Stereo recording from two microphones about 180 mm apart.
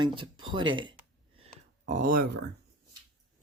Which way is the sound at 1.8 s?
50° right (ahead or behind).